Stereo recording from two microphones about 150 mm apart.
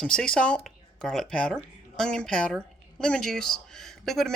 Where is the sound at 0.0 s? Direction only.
5° left (ahead or behind).